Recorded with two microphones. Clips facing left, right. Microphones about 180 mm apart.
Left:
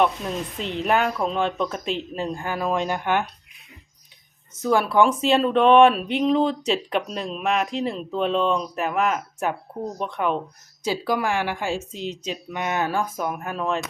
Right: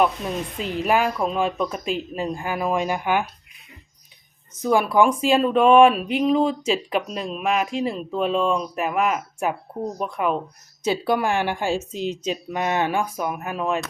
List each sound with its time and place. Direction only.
0.0 s speech: centre (ahead or behind)
5.1 s speech: 5° right (ahead or behind)
11.0 s speech: 25° right (ahead or behind)
11.9 s speech: 50° right (ahead or behind)
12.5 s speech: 35° right (ahead or behind)
13.0 s speech: centre (ahead or behind)